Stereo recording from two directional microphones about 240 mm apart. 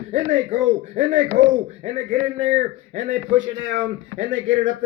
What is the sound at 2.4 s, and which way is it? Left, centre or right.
Speech, right.